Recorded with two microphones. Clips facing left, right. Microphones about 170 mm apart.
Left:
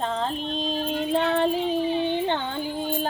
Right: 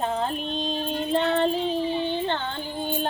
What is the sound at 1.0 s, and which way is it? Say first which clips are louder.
Female singing: even; 10° left (ahead or behind).